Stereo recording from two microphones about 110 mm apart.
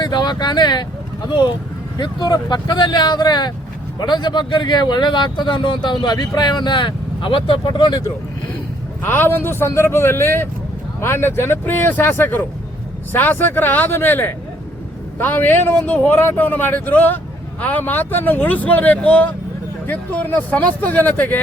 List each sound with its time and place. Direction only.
0.0 s speech: 40° left (ahead or behind)
2.0 s speech: 40° left (ahead or behind)
9.0 s a man's voice: 20° left (ahead or behind)